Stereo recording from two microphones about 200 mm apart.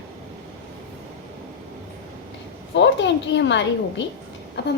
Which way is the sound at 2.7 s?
60° left (ahead or behind).